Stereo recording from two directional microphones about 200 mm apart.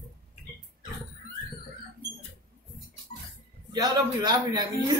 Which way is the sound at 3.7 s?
20° right (ahead or behind).